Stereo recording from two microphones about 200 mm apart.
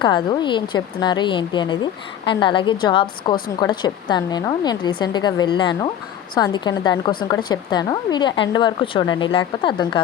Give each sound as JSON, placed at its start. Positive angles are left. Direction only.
{"t": 0.0, "sound": "a woman's voice", "side_deg": 25}